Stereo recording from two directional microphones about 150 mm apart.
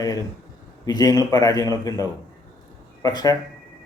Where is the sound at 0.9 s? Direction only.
25° left (ahead or behind).